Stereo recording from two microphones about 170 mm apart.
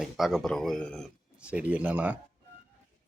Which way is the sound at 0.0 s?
Centre (ahead or behind).